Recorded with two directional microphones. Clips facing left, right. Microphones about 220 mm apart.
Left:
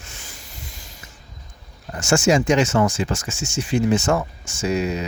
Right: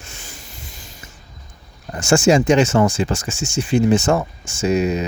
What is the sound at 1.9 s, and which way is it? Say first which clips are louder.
Speech: right 3 dB; 30° right (ahead or behind).